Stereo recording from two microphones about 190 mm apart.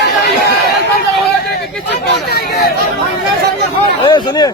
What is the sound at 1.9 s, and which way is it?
Speech, 60° left (ahead or behind).